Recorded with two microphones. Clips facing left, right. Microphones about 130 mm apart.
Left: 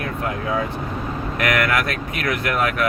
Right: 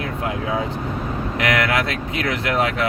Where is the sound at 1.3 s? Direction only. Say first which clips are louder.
Even; 25° right (ahead or behind).